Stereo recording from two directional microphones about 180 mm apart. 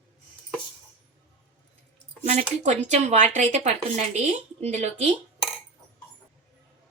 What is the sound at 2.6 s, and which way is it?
A woman's voice, 40° right (ahead or behind).